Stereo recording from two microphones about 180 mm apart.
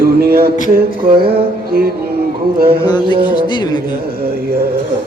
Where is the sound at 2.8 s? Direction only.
25° left (ahead or behind).